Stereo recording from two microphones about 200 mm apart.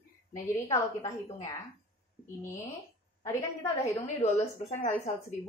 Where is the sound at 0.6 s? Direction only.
15° left (ahead or behind).